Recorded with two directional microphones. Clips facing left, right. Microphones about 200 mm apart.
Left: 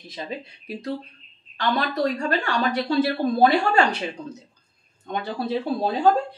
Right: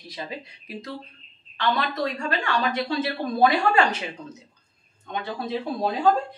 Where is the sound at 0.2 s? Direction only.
30° left (ahead or behind).